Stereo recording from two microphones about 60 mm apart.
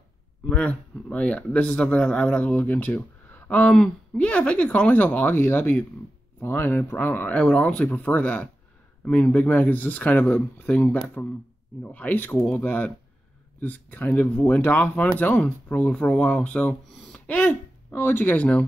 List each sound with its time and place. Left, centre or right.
1.1 s a man's voice: left
3.7 s speech: centre
4.2 s a man's voice: left
7.3 s a man's voice: centre
17.4 s speech: left
18.3 s a man's voice: left